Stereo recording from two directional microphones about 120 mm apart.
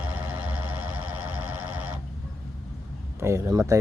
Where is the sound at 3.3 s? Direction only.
20° right (ahead or behind).